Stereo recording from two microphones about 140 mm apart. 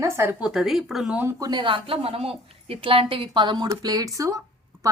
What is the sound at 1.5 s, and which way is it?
A woman's voice, 35° right (ahead or behind).